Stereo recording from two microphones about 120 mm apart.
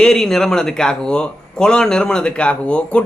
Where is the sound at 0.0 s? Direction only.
5° left (ahead or behind).